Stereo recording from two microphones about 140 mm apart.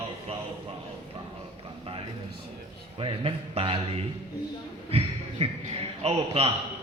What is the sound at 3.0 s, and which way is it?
Speech, 40° right (ahead or behind).